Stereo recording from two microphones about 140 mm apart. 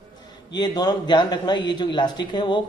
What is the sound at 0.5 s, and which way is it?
A man's voice, 30° left (ahead or behind).